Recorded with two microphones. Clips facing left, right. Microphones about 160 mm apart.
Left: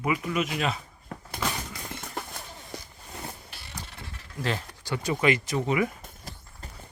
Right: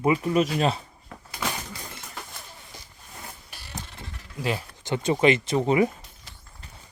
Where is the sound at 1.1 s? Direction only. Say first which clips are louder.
Left 4 dB; 45° left (ahead or behind).